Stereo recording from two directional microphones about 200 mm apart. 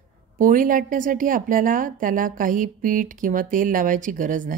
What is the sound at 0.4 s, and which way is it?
A woman's voice, 40° right (ahead or behind).